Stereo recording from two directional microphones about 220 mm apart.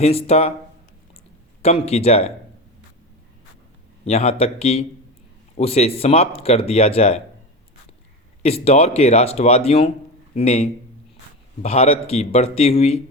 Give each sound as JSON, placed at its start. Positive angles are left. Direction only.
{"t": 0.0, "sound": "speech", "side_deg": 25}
{"t": 1.6, "sound": "speech", "side_deg": 30}
{"t": 4.0, "sound": "speech", "side_deg": 30}
{"t": 8.4, "sound": "speech", "side_deg": 30}